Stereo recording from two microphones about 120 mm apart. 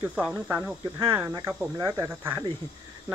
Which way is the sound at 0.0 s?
10° right (ahead or behind).